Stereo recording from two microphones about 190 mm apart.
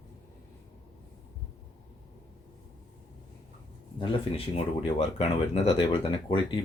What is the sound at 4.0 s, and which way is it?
Speech, 30° left (ahead or behind).